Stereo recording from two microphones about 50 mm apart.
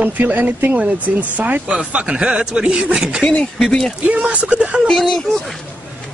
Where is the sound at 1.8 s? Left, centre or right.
Centre.